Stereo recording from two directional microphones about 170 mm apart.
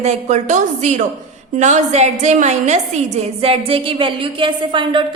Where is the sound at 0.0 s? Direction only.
40° right (ahead or behind).